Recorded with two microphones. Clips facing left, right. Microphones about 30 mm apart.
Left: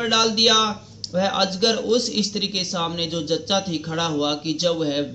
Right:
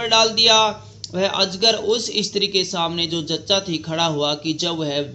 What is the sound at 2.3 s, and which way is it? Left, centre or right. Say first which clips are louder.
A man's voice: right 5 dB; right.